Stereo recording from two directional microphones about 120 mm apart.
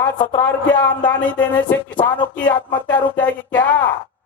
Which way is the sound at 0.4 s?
15° left (ahead or behind).